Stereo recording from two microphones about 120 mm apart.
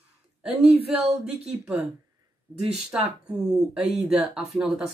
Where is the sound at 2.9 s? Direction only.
10° right (ahead or behind).